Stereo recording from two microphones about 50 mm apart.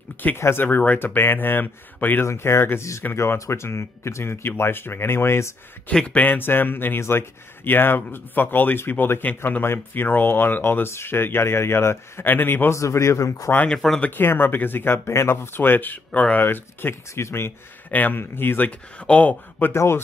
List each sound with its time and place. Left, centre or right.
0.2 s speech: left
2.2 s speech: left
3.2 s speech: left
6.0 s speech: left
12.3 s speech: left
12.7 s speech: left
14.1 s speech: left
16.3 s speech: left
17.1 s speech: left
17.9 s speech: left
18.7 s speech: left
19.7 s speech: left